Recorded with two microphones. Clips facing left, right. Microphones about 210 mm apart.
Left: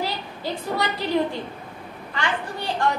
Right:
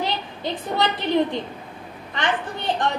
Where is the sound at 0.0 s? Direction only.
20° right (ahead or behind).